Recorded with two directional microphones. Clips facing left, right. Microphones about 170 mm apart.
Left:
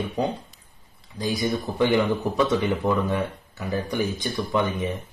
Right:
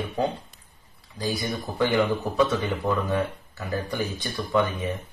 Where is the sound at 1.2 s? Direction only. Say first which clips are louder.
Left 3 dB; 20° left (ahead or behind).